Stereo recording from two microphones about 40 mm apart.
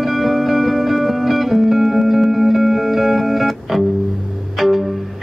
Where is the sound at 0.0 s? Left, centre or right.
Centre.